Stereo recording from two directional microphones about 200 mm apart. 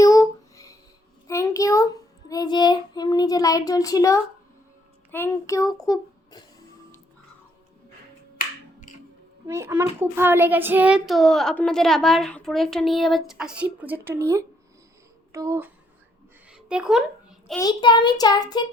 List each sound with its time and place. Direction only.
0.0 s a sound: 15° left (ahead or behind)
1.3 s child singing: 15° left (ahead or behind)
5.1 s a child's voice: 15° left (ahead or behind)
9.5 s a child's voice: 15° right (ahead or behind)
16.5 s a sound: 5° right (ahead or behind)
17.6 s a child's voice: 20° left (ahead or behind)